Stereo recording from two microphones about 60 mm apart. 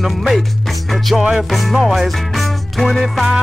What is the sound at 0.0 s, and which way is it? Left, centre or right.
Music, centre.